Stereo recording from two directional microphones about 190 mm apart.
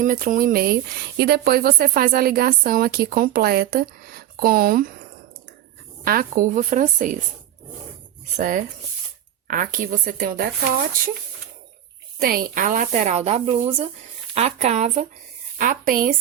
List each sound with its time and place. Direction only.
0.0 s speech: 45° right (ahead or behind)
6.1 s speech: 45° right (ahead or behind)
8.4 s speech: 45° right (ahead or behind)
12.2 s speech: 50° right (ahead or behind)
15.5 s speech: 45° right (ahead or behind)